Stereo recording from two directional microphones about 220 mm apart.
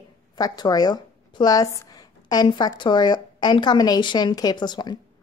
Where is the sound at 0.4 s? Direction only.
20° left (ahead or behind).